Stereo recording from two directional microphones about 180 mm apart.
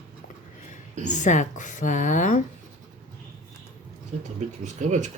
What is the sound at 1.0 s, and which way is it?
Speech, 40° left (ahead or behind).